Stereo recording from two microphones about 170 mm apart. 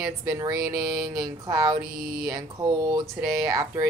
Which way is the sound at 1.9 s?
60° right (ahead or behind).